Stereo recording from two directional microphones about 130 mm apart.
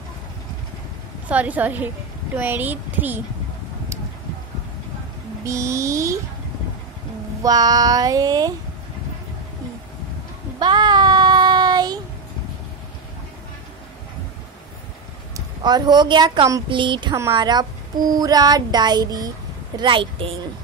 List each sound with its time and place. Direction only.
1.3 s a woman's voice: 10° right (ahead or behind)
5.4 s child singing: 25° right (ahead or behind)
7.4 s child singing: 30° right (ahead or behind)
10.6 s child singing: 35° right (ahead or behind)
15.3 s speech: 35° right (ahead or behind)